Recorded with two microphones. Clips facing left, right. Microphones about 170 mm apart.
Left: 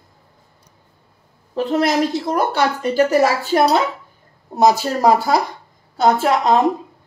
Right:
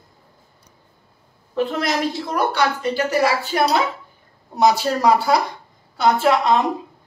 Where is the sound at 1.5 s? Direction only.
40° left (ahead or behind).